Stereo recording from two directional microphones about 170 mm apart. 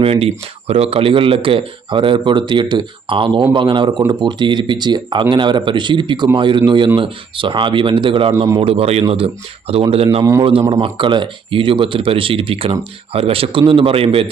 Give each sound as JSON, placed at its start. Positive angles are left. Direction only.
{"t": 0.0, "sound": "speech", "side_deg": -35}